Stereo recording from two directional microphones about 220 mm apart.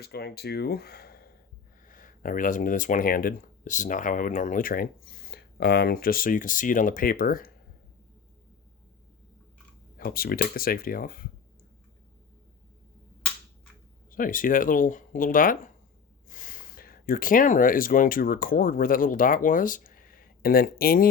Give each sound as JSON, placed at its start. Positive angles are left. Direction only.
{"t": 0.0, "sound": "speech", "side_deg": 45}
{"t": 10.0, "sound": "speech", "side_deg": 40}
{"t": 14.1, "sound": "speech", "side_deg": 40}